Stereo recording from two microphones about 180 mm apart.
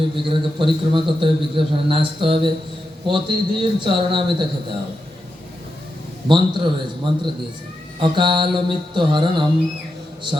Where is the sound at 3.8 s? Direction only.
25° right (ahead or behind).